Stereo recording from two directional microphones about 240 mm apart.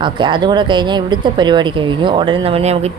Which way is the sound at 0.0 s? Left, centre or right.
Centre.